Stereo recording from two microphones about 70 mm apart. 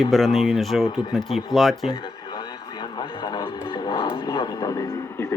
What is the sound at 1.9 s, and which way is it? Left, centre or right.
Radio, left.